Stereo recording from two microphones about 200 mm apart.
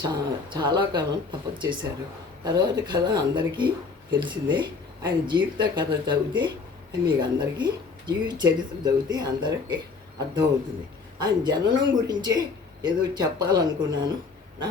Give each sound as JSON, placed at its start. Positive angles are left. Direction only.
{"t": 0.0, "sound": "speech", "side_deg": -20}